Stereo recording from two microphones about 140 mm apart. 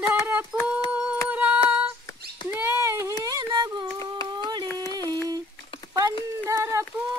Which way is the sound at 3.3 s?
30° right (ahead or behind).